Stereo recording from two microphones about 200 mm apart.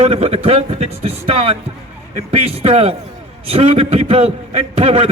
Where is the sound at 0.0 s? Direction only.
30° right (ahead or behind).